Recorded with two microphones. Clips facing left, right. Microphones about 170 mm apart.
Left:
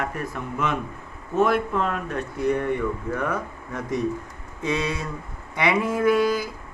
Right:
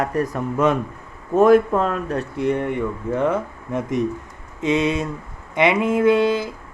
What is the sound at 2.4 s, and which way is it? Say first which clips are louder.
Speech: right 1 dB; 25° right (ahead or behind).